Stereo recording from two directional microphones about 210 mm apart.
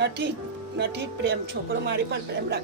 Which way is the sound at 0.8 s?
50° right (ahead or behind).